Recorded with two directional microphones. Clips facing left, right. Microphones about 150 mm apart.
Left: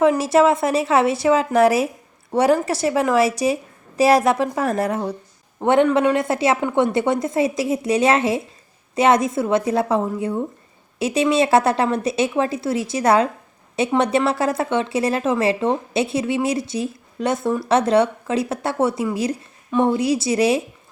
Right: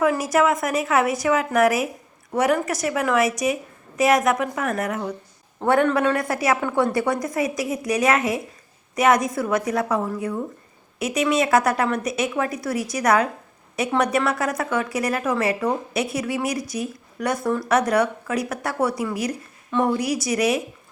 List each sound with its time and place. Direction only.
0.0 s a woman's voice: 25° left (ahead or behind)